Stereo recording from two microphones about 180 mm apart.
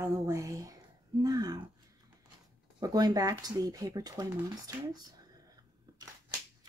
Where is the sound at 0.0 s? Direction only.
15° right (ahead or behind).